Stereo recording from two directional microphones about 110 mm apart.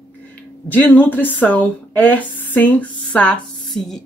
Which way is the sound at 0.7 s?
15° left (ahead or behind).